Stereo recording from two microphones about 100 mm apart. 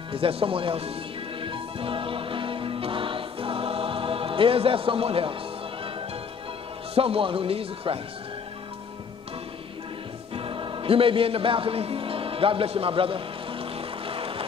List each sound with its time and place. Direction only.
0.1 s speech: 65° right (ahead or behind)
1.4 s music: 60° right (ahead or behind)
7.0 s speech: 65° right (ahead or behind)
10.3 s music: 60° right (ahead or behind)